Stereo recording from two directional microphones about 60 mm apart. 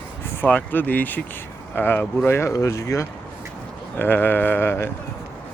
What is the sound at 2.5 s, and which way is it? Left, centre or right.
Speech, left.